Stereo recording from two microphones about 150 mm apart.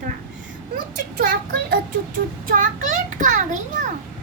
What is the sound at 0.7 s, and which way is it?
Speech, 75° right (ahead or behind).